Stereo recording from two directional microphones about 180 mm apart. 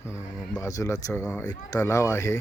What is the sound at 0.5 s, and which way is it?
Speech, 15° left (ahead or behind).